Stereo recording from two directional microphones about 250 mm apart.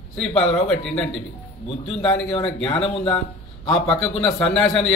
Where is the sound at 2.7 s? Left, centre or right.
Left.